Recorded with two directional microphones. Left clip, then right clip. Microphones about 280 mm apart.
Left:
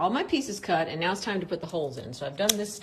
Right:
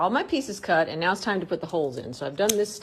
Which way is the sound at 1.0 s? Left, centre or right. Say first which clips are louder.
Right 4 dB; right.